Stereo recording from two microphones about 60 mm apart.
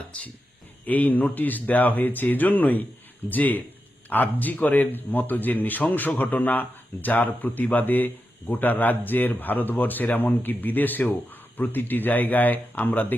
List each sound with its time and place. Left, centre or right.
0.9 s a man's voice: left